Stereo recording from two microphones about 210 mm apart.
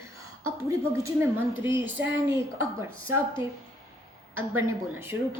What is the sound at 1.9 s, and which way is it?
Speech, 60° right (ahead or behind).